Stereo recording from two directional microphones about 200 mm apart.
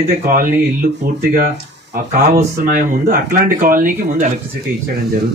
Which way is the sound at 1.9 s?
50° right (ahead or behind).